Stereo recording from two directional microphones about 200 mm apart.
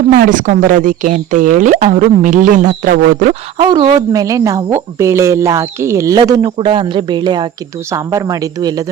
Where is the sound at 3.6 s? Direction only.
25° right (ahead or behind).